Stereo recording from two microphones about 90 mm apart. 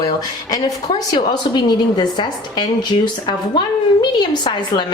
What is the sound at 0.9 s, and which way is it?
A woman's voice, 55° left (ahead or behind).